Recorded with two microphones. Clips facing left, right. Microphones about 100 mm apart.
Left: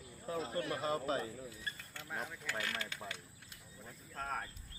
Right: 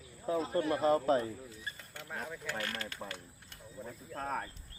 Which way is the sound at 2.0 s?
Centre (ahead or behind).